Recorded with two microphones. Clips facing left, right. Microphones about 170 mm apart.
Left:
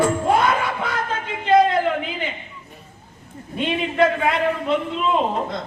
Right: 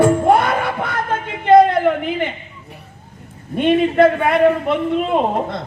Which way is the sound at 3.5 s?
55° right (ahead or behind).